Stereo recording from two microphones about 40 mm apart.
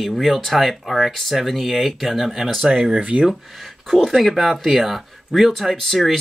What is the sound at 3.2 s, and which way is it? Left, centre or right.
Speech, centre.